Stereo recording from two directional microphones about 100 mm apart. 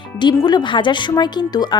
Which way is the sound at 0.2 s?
45° left (ahead or behind).